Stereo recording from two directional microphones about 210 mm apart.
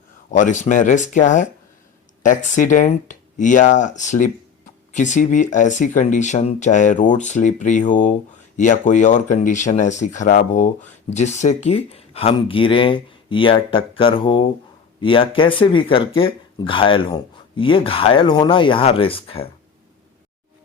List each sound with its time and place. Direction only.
0.3 s speech: 35° left (ahead or behind)